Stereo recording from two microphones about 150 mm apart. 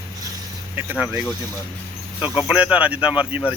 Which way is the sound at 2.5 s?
10° right (ahead or behind).